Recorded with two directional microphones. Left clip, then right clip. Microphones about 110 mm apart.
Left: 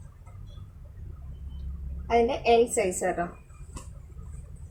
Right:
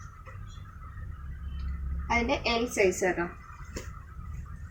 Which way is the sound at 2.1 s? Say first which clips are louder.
Left 5 dB; 45° left (ahead or behind).